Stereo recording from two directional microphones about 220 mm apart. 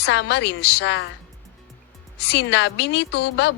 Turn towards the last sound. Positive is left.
turn(degrees=50)  # may be behind; listen again after turning